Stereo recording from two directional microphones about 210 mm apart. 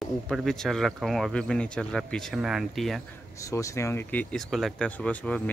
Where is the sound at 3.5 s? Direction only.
15° left (ahead or behind).